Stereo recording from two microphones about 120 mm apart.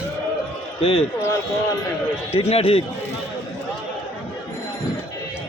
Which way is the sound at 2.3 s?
55° left (ahead or behind).